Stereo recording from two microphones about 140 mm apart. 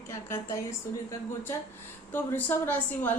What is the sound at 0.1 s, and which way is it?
Speech, 20° left (ahead or behind).